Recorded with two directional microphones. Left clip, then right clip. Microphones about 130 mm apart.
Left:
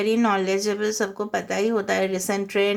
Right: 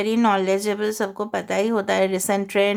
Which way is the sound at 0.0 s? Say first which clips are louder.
Right 2 dB; 40° right (ahead or behind).